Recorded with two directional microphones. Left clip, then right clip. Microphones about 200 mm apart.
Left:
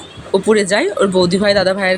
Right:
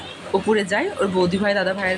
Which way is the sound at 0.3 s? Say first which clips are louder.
Left 7 dB; 20° left (ahead or behind).